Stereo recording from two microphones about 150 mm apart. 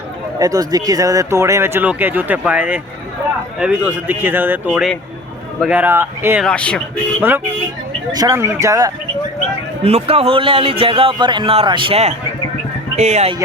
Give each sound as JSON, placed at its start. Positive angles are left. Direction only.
{"t": 0.3, "sound": "speech", "side_deg": -25}
{"t": 6.4, "sound": "speech", "side_deg": 5}
{"t": 7.2, "sound": "speech", "side_deg": -15}
{"t": 9.8, "sound": "speech", "side_deg": -40}